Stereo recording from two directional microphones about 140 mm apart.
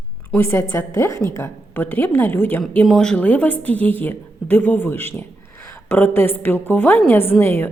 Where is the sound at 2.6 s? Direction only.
5° left (ahead or behind).